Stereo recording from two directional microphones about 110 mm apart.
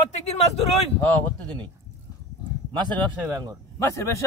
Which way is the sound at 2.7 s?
40° right (ahead or behind).